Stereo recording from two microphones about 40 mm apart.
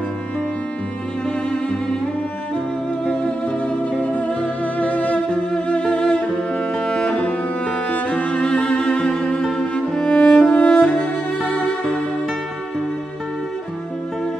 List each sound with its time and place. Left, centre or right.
3.1 s music: left
4.0 s music: left
5.3 s cello: left
7.9 s music: left